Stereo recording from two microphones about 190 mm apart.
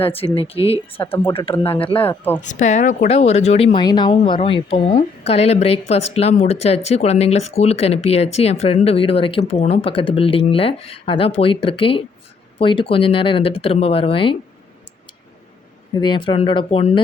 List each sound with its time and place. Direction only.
0.0 s speech: 30° left (ahead or behind)
2.0 s speech: 10° left (ahead or behind)
2.4 s speech: 40° left (ahead or behind)
16.0 s speech: 25° left (ahead or behind)